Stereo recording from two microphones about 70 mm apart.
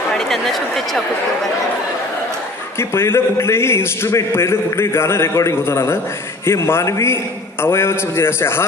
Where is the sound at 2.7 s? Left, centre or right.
Left.